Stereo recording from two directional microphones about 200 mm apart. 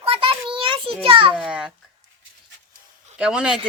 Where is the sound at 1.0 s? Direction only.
25° right (ahead or behind).